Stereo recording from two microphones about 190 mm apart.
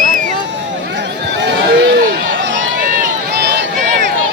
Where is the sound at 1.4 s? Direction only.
65° right (ahead or behind).